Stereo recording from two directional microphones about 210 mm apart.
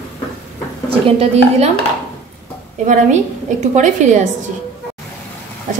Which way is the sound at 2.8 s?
35° right (ahead or behind).